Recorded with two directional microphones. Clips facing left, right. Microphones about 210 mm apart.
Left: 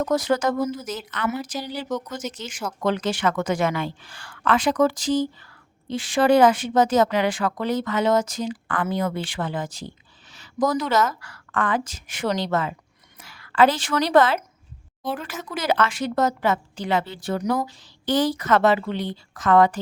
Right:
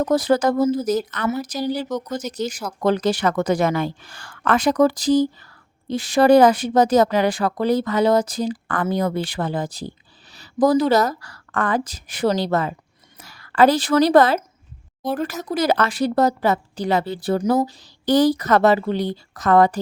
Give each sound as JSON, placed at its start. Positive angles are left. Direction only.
{"t": 0.0, "sound": "speech", "side_deg": -35}